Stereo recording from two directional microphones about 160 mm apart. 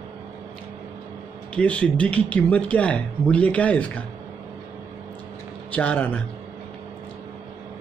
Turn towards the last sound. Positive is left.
turn(degrees=10)  # may be behind; listen again after turning